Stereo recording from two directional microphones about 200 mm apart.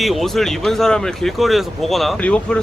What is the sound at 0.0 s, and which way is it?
Speech, centre (ahead or behind).